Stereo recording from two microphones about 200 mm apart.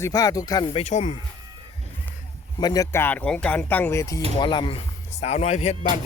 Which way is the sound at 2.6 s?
20° left (ahead or behind).